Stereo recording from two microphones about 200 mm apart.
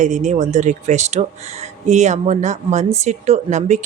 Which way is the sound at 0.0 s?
35° right (ahead or behind).